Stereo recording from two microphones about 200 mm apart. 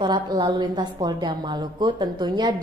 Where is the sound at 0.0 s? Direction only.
25° right (ahead or behind).